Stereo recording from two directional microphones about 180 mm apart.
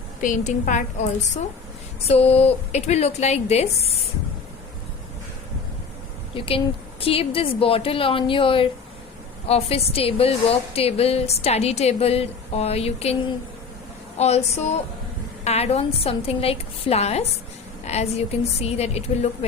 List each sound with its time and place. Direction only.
0.2 s a woman's voice: 45° left (ahead or behind)
6.3 s a woman's voice: 30° left (ahead or behind)
14.2 s a woman's voice: 35° left (ahead or behind)